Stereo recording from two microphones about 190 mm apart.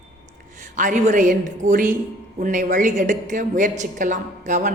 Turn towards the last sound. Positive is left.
turn(degrees=-40)  # may be behind; listen again after turning